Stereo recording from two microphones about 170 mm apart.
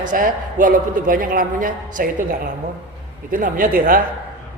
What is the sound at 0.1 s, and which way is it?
Speech, 50° right (ahead or behind).